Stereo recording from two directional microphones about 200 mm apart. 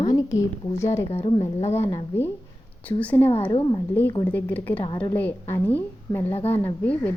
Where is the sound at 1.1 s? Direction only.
30° left (ahead or behind).